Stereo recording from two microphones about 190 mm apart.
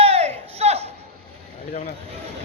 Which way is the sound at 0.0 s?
35° right (ahead or behind).